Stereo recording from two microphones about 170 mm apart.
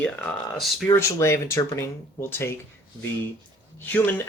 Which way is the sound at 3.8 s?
10° left (ahead or behind).